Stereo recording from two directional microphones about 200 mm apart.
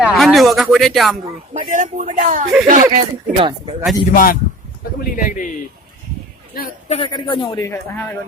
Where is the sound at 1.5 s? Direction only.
40° right (ahead or behind).